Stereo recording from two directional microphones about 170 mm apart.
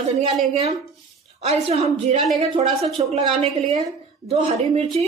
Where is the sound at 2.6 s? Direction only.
35° right (ahead or behind).